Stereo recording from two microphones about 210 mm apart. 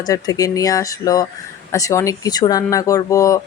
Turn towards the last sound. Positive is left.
turn(degrees=15)  # may be behind; listen again after turning